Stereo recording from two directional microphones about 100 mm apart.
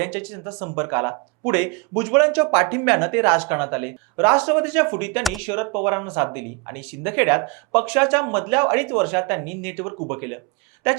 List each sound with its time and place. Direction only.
0.0 s speech: 15° right (ahead or behind)